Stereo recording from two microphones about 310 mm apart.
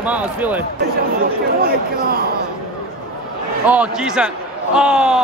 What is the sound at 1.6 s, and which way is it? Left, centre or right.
Speech, right.